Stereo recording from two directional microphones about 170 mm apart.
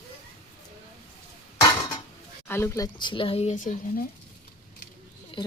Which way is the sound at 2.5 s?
15° left (ahead or behind).